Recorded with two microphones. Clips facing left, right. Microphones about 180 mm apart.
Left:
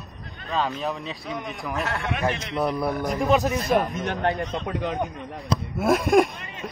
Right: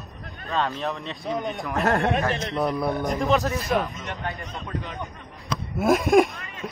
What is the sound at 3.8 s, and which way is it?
Speech, 65° left (ahead or behind).